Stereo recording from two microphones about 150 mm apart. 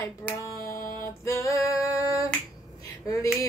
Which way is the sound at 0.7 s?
70° left (ahead or behind).